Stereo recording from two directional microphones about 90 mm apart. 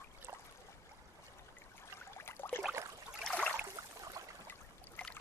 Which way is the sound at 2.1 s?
25° left (ahead or behind).